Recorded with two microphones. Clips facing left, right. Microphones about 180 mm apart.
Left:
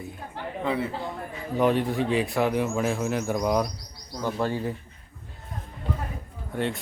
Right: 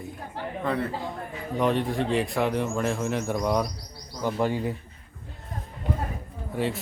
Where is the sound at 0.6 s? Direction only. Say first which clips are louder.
Left 1 dB; 5° left (ahead or behind).